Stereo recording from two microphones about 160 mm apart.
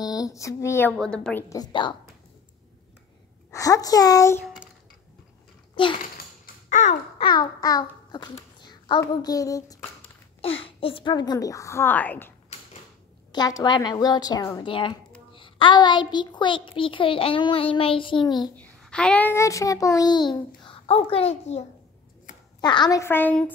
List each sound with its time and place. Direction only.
0.0 s a sound: 20° left (ahead or behind)
0.9 s a woman's voice: 5° left (ahead or behind)
1.5 s a woman's voice: 25° left (ahead or behind)
3.5 s a woman's voice: 20° left (ahead or behind)
5.9 s typewriter: 55° left (ahead or behind)
7.2 s a child's voice: 30° left (ahead or behind)
10.4 s a woman's voice: 35° left (ahead or behind); by 12.3 s 10° left (ahead or behind)
13.3 s a woman's voice: 25° left (ahead or behind)
18.6 s a child's voice: 5° left (ahead or behind); by 21.6 s 40° left (ahead or behind)
22.6 s a woman's voice: 25° left (ahead or behind); by 23.5 s 10° left (ahead or behind)